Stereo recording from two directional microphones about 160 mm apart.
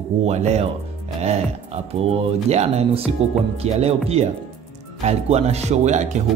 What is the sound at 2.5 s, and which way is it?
Speech, 40° right (ahead or behind).